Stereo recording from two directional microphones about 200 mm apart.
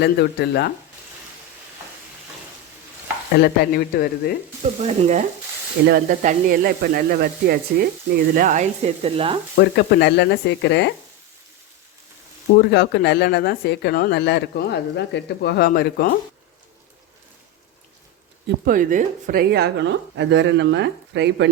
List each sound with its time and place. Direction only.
0.0 s speech: 55° left (ahead or behind)
3.3 s speech: 55° left (ahead or behind)
4.8 s frying: 35° right (ahead or behind)
5.8 s speech: 45° right (ahead or behind)
8.4 s frying: 40° right (ahead or behind)
9.6 s speech: 55° left (ahead or behind)
12.5 s speech: 55° left (ahead or behind)
18.4 s speech: 45° right (ahead or behind); by 21.5 s 60° right (ahead or behind)